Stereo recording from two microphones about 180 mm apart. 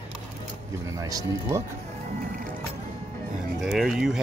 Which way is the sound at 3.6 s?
Centre (ahead or behind).